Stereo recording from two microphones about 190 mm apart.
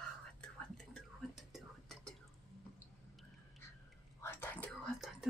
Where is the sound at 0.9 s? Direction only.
Centre (ahead or behind).